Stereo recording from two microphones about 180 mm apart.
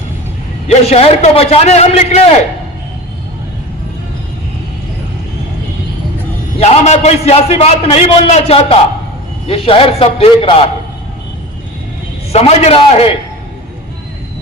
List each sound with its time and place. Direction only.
0.7 s a man's voice: 35° left (ahead or behind)
6.6 s a man's voice: 35° left (ahead or behind)
12.3 s a man's voice: 35° left (ahead or behind)